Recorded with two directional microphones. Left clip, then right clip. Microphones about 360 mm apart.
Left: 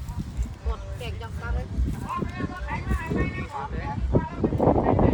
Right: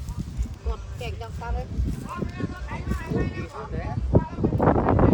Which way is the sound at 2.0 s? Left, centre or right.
Centre.